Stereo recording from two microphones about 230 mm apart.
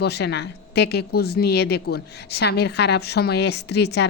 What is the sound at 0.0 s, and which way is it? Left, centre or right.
Speech, left.